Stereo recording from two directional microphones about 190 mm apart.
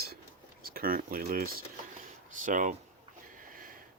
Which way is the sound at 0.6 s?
50° right (ahead or behind).